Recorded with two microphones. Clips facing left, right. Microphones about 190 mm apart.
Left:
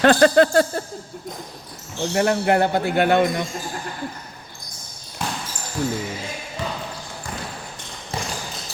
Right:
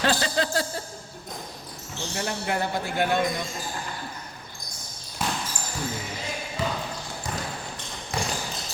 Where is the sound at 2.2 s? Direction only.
65° left (ahead or behind).